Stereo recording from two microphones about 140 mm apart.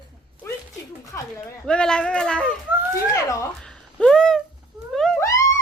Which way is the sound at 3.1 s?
25° left (ahead or behind).